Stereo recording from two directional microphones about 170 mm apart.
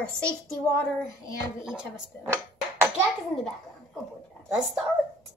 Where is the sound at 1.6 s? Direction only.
5° right (ahead or behind).